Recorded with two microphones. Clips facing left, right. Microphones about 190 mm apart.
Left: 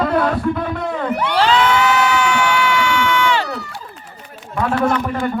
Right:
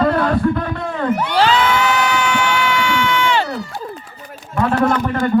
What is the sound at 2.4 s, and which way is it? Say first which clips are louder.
Crowd: left 1 dB; 20° right (ahead or behind).